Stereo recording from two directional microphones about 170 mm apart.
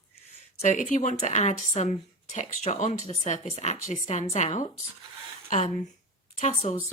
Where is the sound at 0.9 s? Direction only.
45° left (ahead or behind).